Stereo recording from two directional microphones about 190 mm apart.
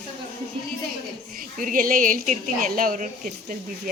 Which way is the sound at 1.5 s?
45° right (ahead or behind).